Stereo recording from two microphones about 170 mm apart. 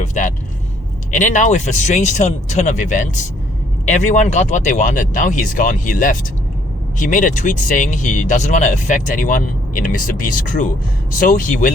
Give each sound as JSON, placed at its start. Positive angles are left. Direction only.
{"t": 0.0, "sound": "speech", "side_deg": 45}